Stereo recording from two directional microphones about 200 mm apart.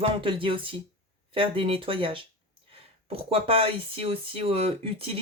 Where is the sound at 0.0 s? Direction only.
25° right (ahead or behind).